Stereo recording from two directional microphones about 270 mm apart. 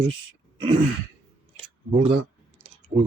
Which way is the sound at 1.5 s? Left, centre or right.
Right.